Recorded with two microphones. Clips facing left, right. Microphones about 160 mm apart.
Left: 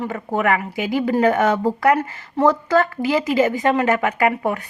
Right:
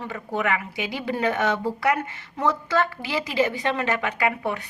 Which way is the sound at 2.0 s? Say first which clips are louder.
Left 9 dB; 35° left (ahead or behind).